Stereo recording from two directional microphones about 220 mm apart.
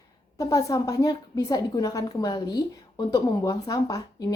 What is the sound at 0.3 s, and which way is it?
A woman's voice, 15° left (ahead or behind).